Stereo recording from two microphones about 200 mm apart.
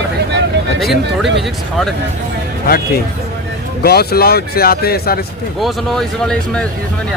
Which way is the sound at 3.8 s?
50° left (ahead or behind).